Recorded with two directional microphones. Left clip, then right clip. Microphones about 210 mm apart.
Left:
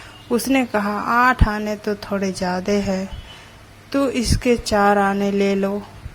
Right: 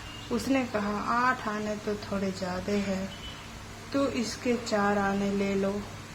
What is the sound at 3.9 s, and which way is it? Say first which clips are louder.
A woman's voice: left 9 dB; 35° left (ahead or behind).